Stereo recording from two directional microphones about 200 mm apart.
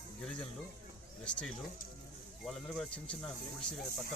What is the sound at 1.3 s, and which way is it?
Speech, 5° left (ahead or behind).